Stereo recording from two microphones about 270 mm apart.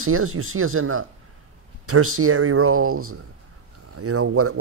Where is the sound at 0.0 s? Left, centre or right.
Right.